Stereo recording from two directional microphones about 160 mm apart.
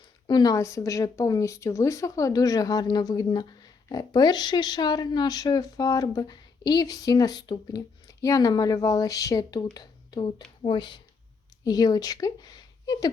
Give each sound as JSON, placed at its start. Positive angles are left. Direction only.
{"t": 0.3, "sound": "speech", "side_deg": 25}